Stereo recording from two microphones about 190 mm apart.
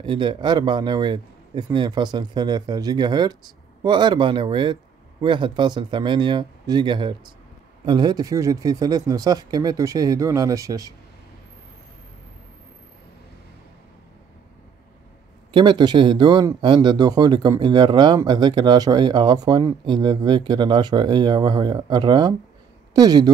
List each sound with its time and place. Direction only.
0.0 s speech: 25° right (ahead or behind)
15.5 s speech: 25° right (ahead or behind)